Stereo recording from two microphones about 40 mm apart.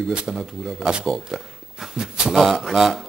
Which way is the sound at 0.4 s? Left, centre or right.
Centre.